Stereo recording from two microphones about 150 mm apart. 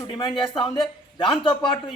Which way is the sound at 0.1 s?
30° left (ahead or behind).